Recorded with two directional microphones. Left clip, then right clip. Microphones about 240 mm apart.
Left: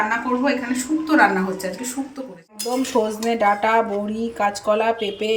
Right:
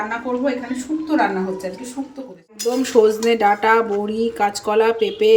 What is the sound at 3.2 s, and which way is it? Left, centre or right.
Speech, centre.